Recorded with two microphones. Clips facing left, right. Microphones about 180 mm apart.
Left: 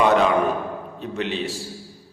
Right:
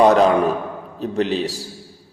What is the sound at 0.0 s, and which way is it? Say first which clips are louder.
A man's voice: right 4 dB; 35° right (ahead or behind).